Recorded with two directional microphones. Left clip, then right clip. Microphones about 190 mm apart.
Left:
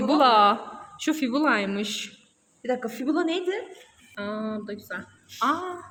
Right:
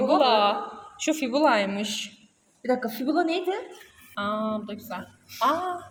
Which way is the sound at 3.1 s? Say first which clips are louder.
Right 1 dB; centre (ahead or behind).